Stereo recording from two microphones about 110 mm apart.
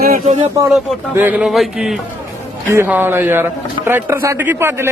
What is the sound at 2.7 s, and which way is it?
A man's voice, 20° right (ahead or behind).